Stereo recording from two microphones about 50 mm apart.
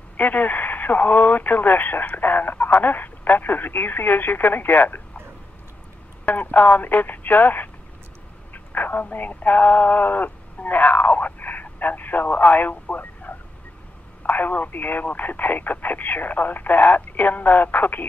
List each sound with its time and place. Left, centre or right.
0.2 s speech: left
6.2 s speech: left